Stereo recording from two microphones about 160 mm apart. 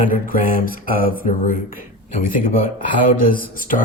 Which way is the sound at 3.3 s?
60° left (ahead or behind).